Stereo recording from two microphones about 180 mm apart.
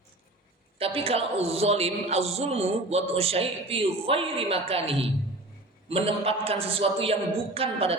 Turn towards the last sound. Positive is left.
turn(degrees=-30)  # may be behind; listen again after turning